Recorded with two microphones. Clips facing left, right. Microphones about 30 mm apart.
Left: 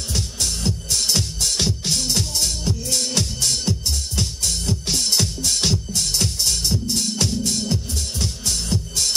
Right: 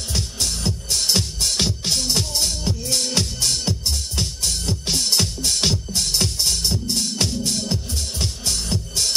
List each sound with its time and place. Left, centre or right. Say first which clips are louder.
0.1 s music: even; centre
3.7 s music: left 1 dB; right
4.5 s music: even; centre